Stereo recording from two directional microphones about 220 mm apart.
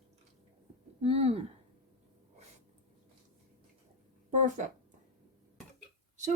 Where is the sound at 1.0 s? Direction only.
25° right (ahead or behind).